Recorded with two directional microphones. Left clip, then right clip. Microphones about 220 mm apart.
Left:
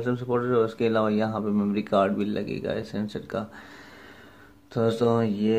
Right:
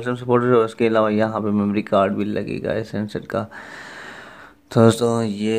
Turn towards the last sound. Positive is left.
turn(degrees=-40)  # may be behind; listen again after turning